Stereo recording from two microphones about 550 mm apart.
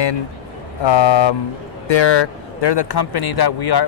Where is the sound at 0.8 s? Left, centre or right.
Left.